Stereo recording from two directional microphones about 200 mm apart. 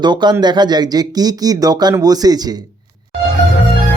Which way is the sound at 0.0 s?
20° right (ahead or behind).